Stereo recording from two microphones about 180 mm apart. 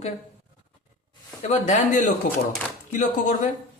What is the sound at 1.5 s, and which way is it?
Speech, 40° left (ahead or behind).